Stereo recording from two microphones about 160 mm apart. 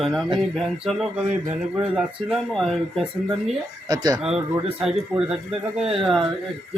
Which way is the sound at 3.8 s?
25° right (ahead or behind).